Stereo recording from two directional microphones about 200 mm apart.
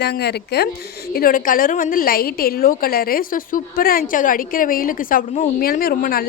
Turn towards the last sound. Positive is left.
turn(degrees=45)  # may be behind; listen again after turning